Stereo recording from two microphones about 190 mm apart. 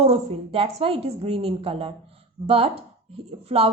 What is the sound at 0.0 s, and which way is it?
A woman's voice, 30° right (ahead or behind).